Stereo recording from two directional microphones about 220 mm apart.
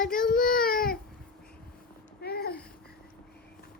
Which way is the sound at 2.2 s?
45° left (ahead or behind).